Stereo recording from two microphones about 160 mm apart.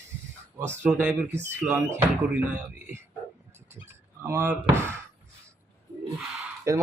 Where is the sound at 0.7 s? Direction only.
10° right (ahead or behind).